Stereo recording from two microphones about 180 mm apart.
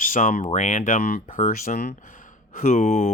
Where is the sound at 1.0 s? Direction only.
50° left (ahead or behind).